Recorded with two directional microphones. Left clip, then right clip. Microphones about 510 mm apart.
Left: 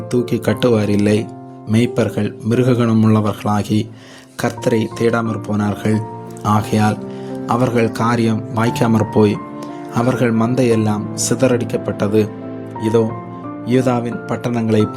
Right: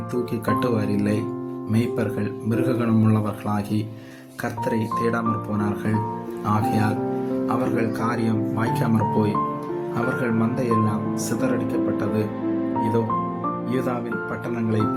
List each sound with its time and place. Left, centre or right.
0.1 s a man's voice: right
13.7 s a man's voice: right